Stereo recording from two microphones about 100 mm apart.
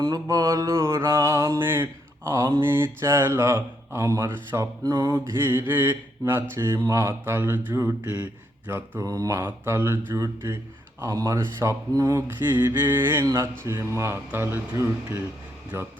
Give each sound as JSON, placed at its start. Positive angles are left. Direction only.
{"t": 0.0, "sound": "mantra", "side_deg": -35}
{"t": 5.1, "sound": "mantra", "side_deg": -25}
{"t": 9.0, "sound": "speech", "side_deg": -35}
{"t": 9.4, "sound": "mantra", "side_deg": -25}
{"t": 11.0, "sound": "speech", "side_deg": -30}
{"t": 12.4, "sound": "mantra", "side_deg": -20}